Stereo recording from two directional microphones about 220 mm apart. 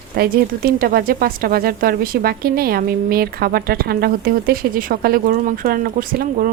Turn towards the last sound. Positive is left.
turn(degrees=-40)  # may be behind; listen again after turning